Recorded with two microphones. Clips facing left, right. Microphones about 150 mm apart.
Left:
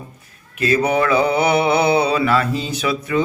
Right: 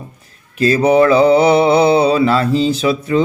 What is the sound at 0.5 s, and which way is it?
Mantra, 30° right (ahead or behind).